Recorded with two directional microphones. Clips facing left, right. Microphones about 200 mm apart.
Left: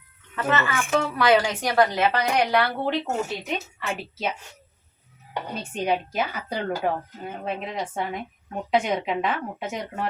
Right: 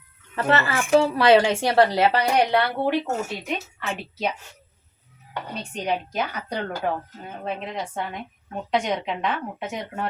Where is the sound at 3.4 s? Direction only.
Centre (ahead or behind).